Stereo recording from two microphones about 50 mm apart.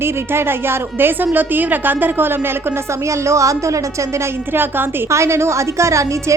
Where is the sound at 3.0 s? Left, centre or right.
Right.